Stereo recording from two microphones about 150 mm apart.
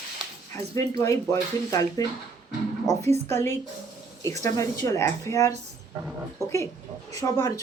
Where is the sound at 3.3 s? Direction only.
15° left (ahead or behind).